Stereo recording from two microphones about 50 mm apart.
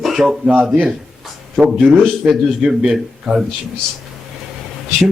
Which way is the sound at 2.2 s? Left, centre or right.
Right.